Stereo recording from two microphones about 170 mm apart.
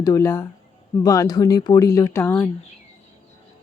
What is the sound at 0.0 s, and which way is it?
Speech, 20° left (ahead or behind).